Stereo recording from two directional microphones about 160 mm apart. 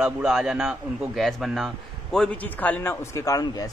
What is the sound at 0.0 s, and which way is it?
A man's voice, 5° right (ahead or behind).